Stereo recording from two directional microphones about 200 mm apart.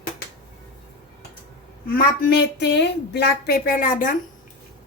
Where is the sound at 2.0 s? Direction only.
55° left (ahead or behind).